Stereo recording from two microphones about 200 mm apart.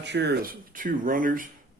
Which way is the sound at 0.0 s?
60° right (ahead or behind).